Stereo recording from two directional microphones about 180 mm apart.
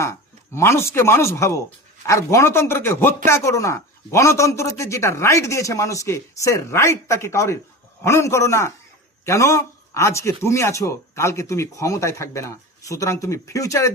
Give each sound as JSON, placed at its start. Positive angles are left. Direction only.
{"t": 0.0, "sound": "speech", "side_deg": 15}